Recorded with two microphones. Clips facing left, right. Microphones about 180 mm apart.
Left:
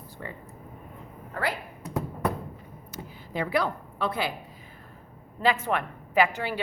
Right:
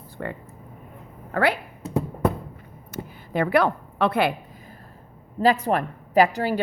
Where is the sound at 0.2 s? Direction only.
60° right (ahead or behind).